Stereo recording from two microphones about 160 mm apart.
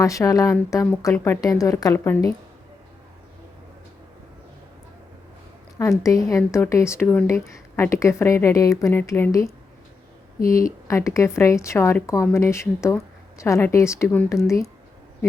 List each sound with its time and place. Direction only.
0.0 s speech: 20° left (ahead or behind)
6.0 s speech: 20° left (ahead or behind)